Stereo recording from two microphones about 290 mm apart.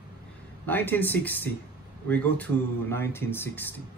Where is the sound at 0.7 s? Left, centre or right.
Centre.